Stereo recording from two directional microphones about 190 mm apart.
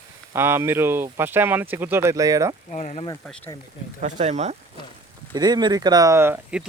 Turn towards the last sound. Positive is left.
turn(degrees=-10)  # may be behind; listen again after turning